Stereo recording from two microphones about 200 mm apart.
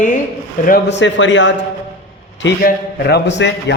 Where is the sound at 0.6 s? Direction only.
55° left (ahead or behind).